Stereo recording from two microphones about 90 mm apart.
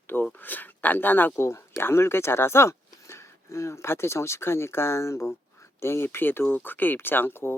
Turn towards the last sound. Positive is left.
turn(degrees=25)  # may be behind; listen again after turning